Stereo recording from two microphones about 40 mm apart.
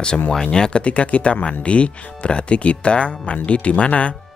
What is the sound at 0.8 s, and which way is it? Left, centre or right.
Speech, left.